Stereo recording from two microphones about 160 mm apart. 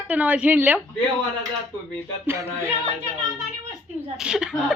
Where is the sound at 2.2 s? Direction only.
15° right (ahead or behind).